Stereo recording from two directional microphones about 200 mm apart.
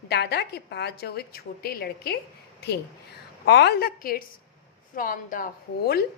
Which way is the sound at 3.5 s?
55° left (ahead or behind).